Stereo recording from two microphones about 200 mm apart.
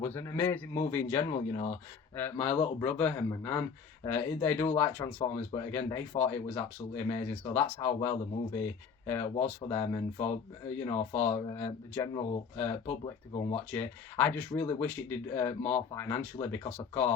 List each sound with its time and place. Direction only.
0.0 s speech: 10° left (ahead or behind)
9.3 s speech: 25° left (ahead or behind)
13.7 s speech: 10° left (ahead or behind)